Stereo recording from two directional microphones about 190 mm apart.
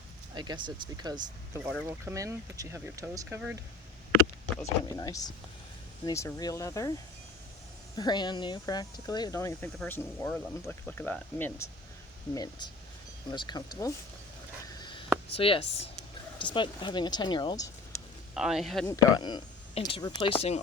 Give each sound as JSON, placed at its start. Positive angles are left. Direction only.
{"t": 0.3, "sound": "speech", "side_deg": -25}
{"t": 4.9, "sound": "speech", "side_deg": 20}
{"t": 7.9, "sound": "speech", "side_deg": 25}
{"t": 12.3, "sound": "speech", "side_deg": 20}
{"t": 14.8, "sound": "a sound", "side_deg": 25}
{"t": 16.4, "sound": "speech", "side_deg": 25}
{"t": 18.3, "sound": "speech", "side_deg": 0}
{"t": 18.9, "sound": "speech", "side_deg": 20}